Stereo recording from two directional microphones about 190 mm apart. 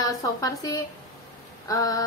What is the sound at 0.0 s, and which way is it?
A woman's voice, 20° left (ahead or behind).